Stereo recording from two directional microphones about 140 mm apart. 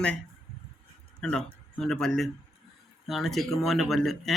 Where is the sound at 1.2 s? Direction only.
5° left (ahead or behind).